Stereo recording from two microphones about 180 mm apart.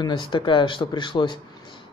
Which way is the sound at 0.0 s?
25° left (ahead or behind).